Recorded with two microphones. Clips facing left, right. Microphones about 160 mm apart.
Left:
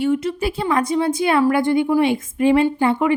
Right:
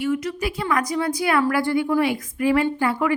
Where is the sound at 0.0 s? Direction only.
30° left (ahead or behind).